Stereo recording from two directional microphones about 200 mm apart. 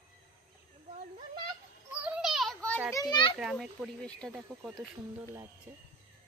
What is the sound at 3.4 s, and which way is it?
Speech, centre (ahead or behind).